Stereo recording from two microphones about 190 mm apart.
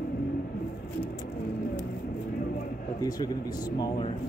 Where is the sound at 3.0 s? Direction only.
20° left (ahead or behind).